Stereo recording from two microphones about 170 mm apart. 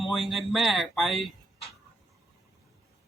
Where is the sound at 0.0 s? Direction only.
Centre (ahead or behind).